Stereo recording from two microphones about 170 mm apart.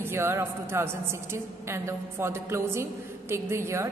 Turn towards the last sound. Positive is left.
turn(degrees=-15)  # may be behind; listen again after turning